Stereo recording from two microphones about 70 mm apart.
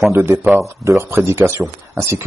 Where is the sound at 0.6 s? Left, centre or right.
Right.